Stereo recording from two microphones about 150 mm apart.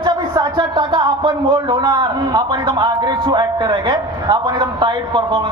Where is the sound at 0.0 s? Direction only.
30° right (ahead or behind).